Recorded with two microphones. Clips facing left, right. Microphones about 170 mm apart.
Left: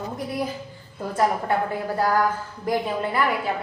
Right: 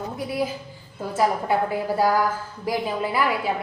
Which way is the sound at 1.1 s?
5° right (ahead or behind).